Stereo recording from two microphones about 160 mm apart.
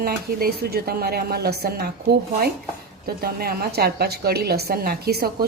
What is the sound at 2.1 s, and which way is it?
A woman's voice, 75° right (ahead or behind).